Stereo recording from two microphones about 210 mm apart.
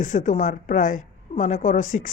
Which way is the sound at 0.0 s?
35° left (ahead or behind).